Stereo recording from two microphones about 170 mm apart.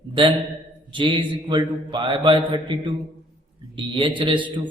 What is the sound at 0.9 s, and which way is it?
A man's voice, 30° right (ahead or behind).